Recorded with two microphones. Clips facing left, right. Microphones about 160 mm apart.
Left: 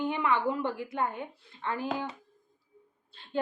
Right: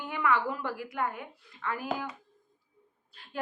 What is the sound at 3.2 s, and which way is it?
Speech, 25° left (ahead or behind).